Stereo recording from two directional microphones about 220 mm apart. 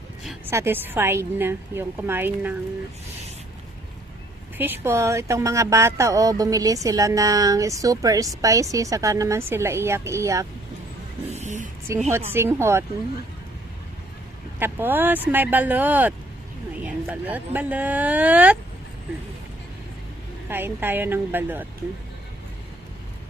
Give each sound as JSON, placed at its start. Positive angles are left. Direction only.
{"t": 0.3, "sound": "a woman's voice", "side_deg": -10}
{"t": 4.5, "sound": "a woman's voice", "side_deg": -10}
{"t": 11.3, "sound": "a sound", "side_deg": -30}
{"t": 12.1, "sound": "a woman's voice", "side_deg": -10}
{"t": 14.6, "sound": "a woman's voice", "side_deg": -10}
{"t": 20.5, "sound": "a woman's voice", "side_deg": -10}